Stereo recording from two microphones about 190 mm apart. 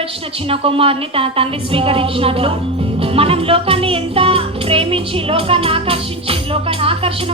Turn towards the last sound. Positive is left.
turn(degrees=-30)  # may be behind; listen again after turning